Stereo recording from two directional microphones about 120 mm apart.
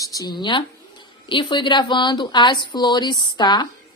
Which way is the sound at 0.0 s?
30° left (ahead or behind).